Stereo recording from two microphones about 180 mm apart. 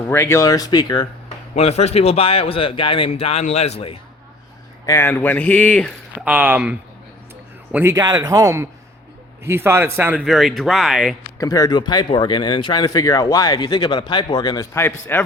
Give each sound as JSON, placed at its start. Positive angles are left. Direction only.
{"t": 0.1, "sound": "speech", "side_deg": 15}
{"t": 1.5, "sound": "a man's voice", "side_deg": 35}
{"t": 4.9, "sound": "a man's voice", "side_deg": 15}
{"t": 6.2, "sound": "a man's voice", "side_deg": -10}
{"t": 11.3, "sound": "speech", "side_deg": 20}